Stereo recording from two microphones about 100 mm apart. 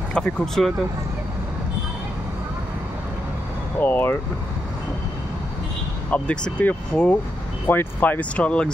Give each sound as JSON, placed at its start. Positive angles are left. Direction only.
{"t": 0.1, "sound": "speech", "side_deg": 5}
{"t": 3.8, "sound": "speech", "side_deg": 20}
{"t": 6.0, "sound": "speech", "side_deg": 15}